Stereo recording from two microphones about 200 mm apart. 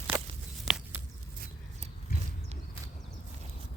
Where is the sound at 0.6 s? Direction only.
5° right (ahead or behind).